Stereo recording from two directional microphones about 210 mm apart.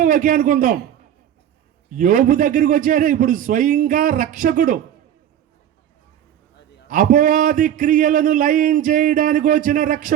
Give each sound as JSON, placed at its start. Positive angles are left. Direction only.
{"t": 0.0, "sound": "a man's voice", "side_deg": -40}
{"t": 2.0, "sound": "a man's voice", "side_deg": -40}
{"t": 6.8, "sound": "a man's voice", "side_deg": -40}